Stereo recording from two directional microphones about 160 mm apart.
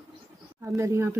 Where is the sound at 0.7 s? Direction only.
15° right (ahead or behind).